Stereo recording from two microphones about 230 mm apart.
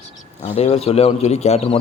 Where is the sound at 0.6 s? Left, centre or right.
Left.